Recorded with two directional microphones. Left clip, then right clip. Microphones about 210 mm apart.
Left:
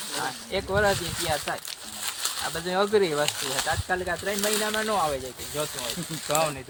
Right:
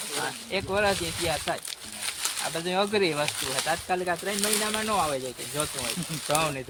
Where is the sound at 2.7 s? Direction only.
50° right (ahead or behind).